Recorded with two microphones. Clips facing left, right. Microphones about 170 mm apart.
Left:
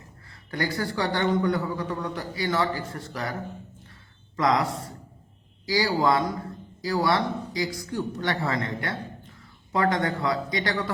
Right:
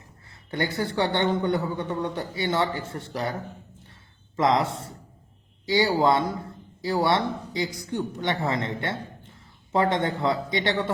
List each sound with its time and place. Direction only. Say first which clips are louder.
0.3 s a man's voice: right 1 dB; 25° right (ahead or behind)
4.4 s a man's voice: right 1 dB; 25° right (ahead or behind)